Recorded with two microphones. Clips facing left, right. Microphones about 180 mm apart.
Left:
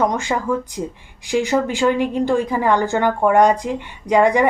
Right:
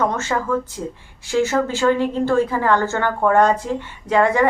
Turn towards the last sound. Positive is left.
turn(degrees=15)  # may be behind; listen again after turning